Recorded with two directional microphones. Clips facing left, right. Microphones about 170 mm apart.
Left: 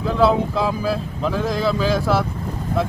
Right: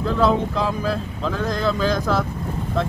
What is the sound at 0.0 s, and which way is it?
Speech, 5° left (ahead or behind).